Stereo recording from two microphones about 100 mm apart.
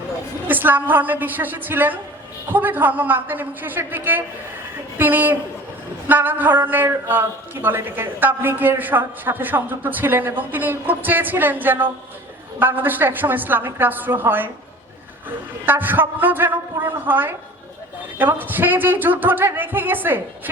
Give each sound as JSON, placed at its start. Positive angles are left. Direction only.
{"t": 0.4, "sound": "a man's voice", "side_deg": -20}
{"t": 15.6, "sound": "a man's voice", "side_deg": -20}